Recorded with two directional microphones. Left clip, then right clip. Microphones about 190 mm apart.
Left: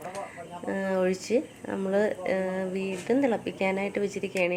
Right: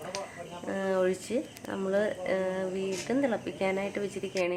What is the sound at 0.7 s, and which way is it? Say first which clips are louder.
Speech: left 1 dB; 15° left (ahead or behind).